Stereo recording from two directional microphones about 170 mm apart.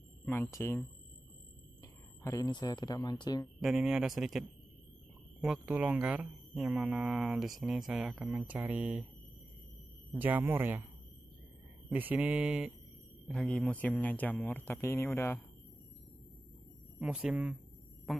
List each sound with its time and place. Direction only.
0.2 s speech: 15° left (ahead or behind)
3.6 s speech: 5° right (ahead or behind)
10.1 s speech: 10° right (ahead or behind)
11.9 s speech: 10° right (ahead or behind)
13.3 s speech: 5° left (ahead or behind)
17.0 s speech: 5° right (ahead or behind)